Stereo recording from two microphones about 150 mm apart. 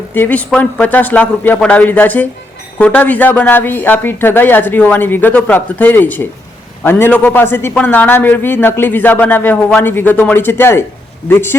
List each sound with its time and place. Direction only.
0.1 s a man's voice: 10° left (ahead or behind)